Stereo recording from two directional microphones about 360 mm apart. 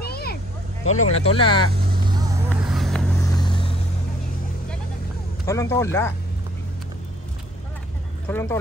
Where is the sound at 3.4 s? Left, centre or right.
Centre.